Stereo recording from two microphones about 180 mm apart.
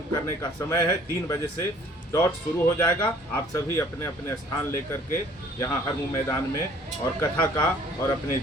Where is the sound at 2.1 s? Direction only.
15° left (ahead or behind).